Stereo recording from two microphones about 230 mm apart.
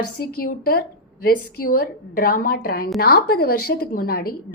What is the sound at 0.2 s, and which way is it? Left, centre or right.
A woman's voice, left.